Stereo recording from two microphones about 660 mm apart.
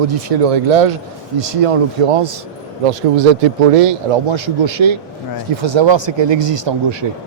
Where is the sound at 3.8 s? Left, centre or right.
Right.